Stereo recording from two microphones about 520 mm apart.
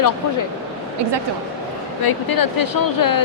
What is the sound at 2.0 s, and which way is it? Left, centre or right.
A woman's voice, left.